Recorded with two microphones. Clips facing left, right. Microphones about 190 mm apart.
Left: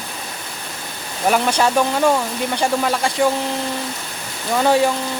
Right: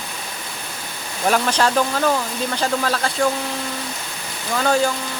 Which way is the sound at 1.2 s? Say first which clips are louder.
Left 2 dB; 10° left (ahead or behind).